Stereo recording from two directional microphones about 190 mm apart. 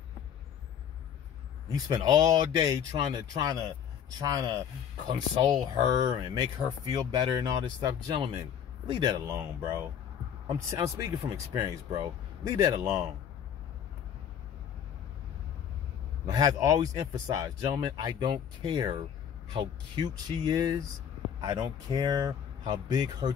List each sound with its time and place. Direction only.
1.7 s speech: 20° right (ahead or behind)
16.3 s speech: 20° right (ahead or behind)